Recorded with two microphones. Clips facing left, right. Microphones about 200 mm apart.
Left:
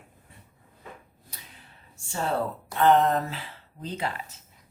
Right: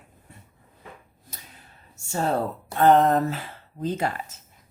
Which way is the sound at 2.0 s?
40° right (ahead or behind).